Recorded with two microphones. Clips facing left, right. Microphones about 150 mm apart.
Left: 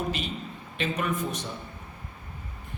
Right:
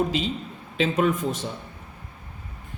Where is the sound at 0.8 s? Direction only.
90° right.